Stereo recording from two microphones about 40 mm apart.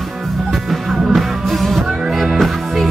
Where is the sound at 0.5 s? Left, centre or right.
Centre.